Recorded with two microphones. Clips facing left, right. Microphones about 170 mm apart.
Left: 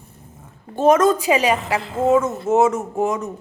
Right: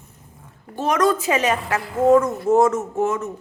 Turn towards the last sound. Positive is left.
turn(degrees=15)  # may be behind; listen again after turning